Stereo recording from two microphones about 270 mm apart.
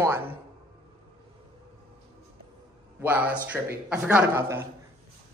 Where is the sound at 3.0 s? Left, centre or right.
Centre.